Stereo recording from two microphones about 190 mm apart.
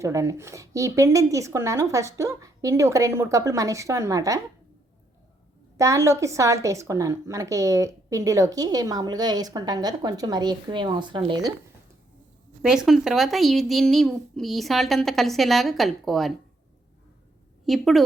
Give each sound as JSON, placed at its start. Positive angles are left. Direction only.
{"t": 0.0, "sound": "speech", "side_deg": -15}
{"t": 5.7, "sound": "a woman's voice", "side_deg": -15}
{"t": 12.6, "sound": "a child's voice", "side_deg": -5}
{"t": 17.7, "sound": "a child's voice", "side_deg": 0}